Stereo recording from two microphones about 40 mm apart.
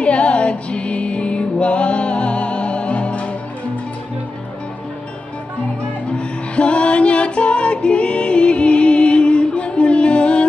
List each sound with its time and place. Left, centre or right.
0.0 s music: left
6.1 s music: left